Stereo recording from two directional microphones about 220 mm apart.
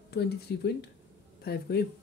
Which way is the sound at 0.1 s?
50° left (ahead or behind).